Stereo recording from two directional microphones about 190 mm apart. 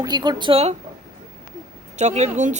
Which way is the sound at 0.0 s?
20° right (ahead or behind).